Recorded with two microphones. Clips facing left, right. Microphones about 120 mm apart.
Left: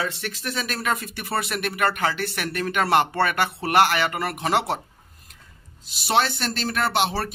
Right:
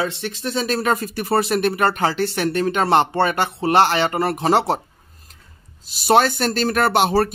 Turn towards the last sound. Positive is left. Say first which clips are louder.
# right 7 dB
turn(degrees=-45)  # may be behind; listen again after turning